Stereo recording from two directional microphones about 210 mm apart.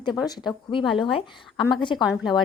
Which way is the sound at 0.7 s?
25° left (ahead or behind).